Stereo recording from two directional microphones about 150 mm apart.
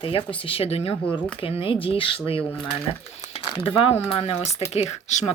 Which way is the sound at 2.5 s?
5° left (ahead or behind).